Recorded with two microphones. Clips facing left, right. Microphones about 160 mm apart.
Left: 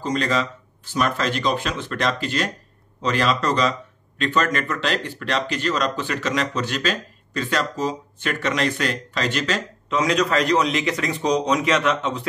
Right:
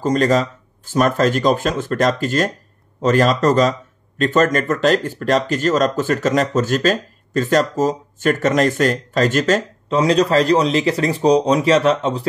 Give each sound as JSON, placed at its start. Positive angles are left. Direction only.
{"t": 0.0, "sound": "speech", "side_deg": -45}
{"t": 9.8, "sound": "a man's voice", "side_deg": -30}